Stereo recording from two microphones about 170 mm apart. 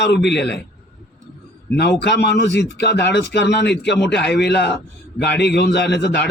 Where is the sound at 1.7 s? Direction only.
85° left.